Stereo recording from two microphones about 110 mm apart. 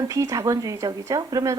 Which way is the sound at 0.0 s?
30° right (ahead or behind).